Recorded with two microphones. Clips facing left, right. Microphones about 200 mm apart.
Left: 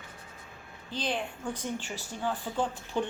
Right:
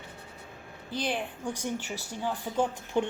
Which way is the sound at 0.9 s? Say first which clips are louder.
Right 1 dB; 10° right (ahead or behind).